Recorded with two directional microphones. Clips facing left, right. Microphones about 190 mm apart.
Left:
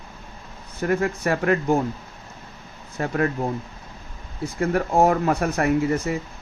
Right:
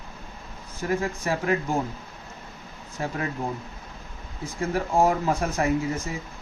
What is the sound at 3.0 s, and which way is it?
Speech, 60° left (ahead or behind).